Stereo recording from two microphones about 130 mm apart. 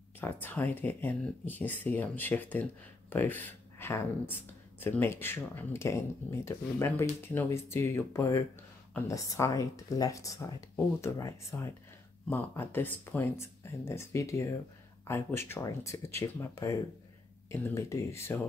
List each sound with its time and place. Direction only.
0.2 s speech: 15° left (ahead or behind)